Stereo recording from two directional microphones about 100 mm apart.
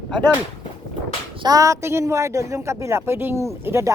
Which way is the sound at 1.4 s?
35° right (ahead or behind).